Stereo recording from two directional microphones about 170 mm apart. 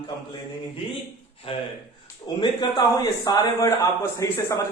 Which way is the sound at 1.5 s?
35° left (ahead or behind).